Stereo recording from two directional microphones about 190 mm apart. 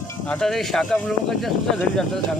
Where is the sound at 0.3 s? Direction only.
5° left (ahead or behind).